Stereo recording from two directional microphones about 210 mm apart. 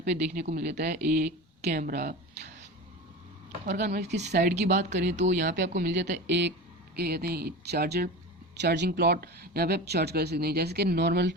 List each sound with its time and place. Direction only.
0.0 s speech: 50° right (ahead or behind)
1.6 s a sound: 45° right (ahead or behind)
3.8 s speech: 35° right (ahead or behind)
4.3 s speech: 50° right (ahead or behind)
4.5 s speech: 35° right (ahead or behind)
5.5 s speech: 55° right (ahead or behind)